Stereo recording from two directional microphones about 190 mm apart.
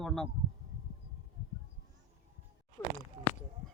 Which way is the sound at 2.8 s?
15° left (ahead or behind).